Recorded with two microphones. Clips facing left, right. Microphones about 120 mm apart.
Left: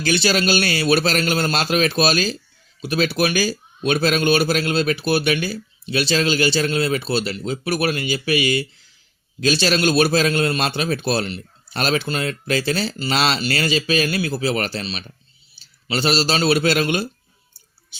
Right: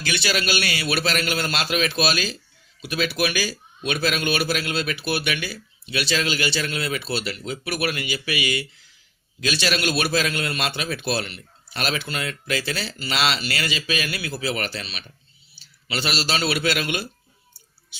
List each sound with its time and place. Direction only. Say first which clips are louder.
0.0 s a man's voice: left 6 dB; 35° left (ahead or behind)